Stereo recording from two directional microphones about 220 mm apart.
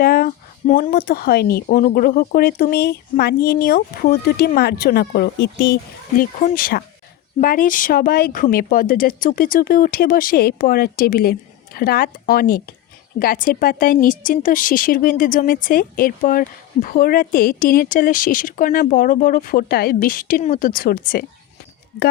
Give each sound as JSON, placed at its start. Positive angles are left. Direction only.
{"t": 0.0, "sound": "a woman's voice", "side_deg": 40}